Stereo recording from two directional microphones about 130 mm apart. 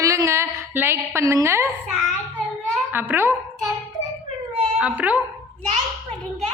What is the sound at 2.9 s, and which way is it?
Speech, 15° right (ahead or behind).